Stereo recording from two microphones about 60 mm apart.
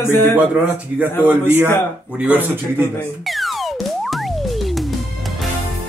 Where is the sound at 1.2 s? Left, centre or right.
Right.